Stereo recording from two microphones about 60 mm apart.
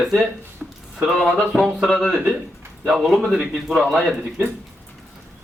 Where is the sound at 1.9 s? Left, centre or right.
Centre.